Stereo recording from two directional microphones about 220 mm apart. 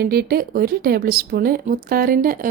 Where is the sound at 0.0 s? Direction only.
45° right (ahead or behind).